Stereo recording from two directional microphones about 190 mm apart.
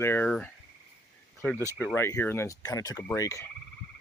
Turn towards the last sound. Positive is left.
turn(degrees=15)  # may be behind; listen again after turning